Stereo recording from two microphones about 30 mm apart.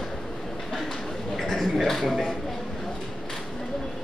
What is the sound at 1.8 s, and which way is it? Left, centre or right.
Speech, centre.